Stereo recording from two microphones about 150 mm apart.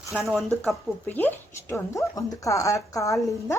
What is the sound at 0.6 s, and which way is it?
Speech, 10° left (ahead or behind).